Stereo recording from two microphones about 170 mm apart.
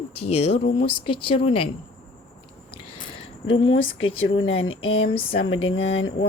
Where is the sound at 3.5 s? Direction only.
30° left (ahead or behind).